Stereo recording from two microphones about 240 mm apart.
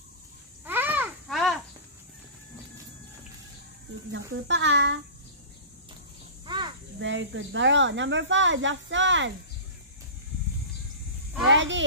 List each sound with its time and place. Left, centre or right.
0.7 s a sound: centre
4.1 s speech: right
6.4 s snake: centre
7.0 s speech: right
11.4 s speech: right